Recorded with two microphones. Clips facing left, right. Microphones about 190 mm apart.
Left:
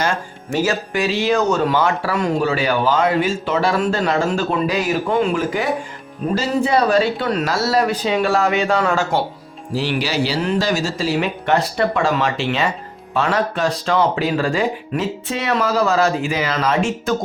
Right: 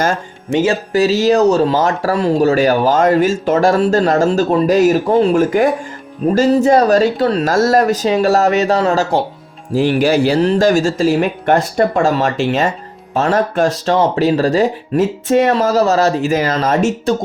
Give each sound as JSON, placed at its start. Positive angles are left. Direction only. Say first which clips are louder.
{"t": 0.5, "sound": "speech", "louder": "right 5 dB", "side_deg": -25}
{"t": 0.9, "sound": "speech", "louder": "right 7 dB", "side_deg": -40}